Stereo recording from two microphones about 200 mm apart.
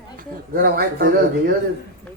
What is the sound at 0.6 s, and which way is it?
Speech, 50° right (ahead or behind).